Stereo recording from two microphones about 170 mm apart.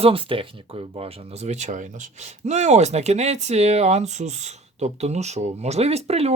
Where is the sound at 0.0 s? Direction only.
30° right (ahead or behind).